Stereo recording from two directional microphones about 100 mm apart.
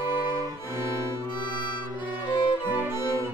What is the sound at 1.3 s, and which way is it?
Music, 50° left (ahead or behind).